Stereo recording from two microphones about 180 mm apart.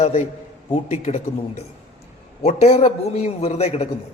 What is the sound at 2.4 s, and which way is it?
A man's voice, 35° left (ahead or behind).